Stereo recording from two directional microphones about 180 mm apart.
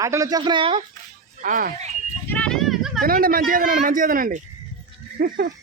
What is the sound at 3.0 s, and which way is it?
Speech, 55° right (ahead or behind).